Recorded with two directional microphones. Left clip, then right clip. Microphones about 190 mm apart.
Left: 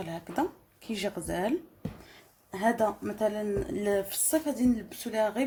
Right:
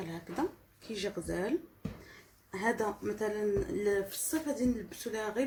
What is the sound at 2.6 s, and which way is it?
Speech, 40° left (ahead or behind).